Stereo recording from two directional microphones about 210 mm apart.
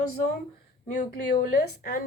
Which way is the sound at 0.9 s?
45° left (ahead or behind).